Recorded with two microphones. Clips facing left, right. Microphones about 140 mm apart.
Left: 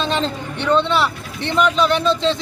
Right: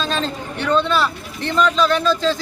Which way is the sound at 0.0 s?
20° left (ahead or behind).